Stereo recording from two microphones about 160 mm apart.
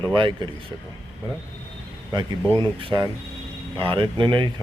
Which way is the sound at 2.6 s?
25° right (ahead or behind).